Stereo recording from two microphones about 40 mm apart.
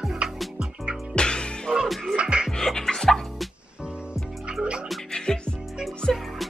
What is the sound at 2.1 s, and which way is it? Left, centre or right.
Music, right.